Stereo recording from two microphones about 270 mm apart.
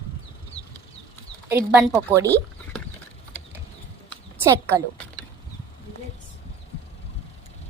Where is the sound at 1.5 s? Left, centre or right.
Centre.